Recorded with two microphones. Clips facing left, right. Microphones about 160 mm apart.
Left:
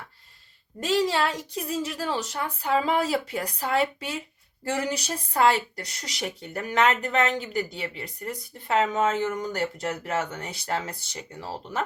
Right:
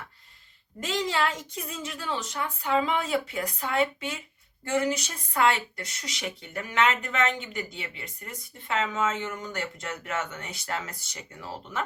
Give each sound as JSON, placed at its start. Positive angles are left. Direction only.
{"t": 0.8, "sound": "speech", "side_deg": 35}